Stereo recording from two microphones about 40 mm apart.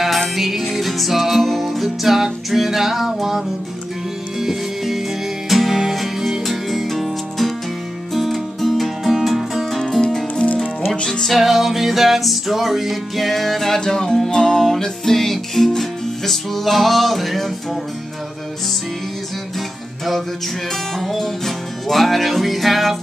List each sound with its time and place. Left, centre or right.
0.4 s music: centre
10.0 s music: centre
11.2 s music: centre
21.0 s music: centre